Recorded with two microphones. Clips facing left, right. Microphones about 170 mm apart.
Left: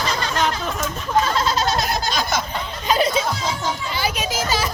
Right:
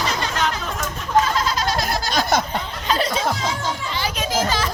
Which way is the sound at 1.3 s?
30° left (ahead or behind).